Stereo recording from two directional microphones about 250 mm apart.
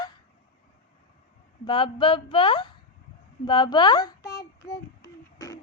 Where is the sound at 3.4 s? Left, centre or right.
Centre.